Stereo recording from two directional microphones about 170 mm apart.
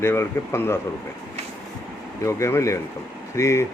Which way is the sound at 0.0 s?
15° left (ahead or behind).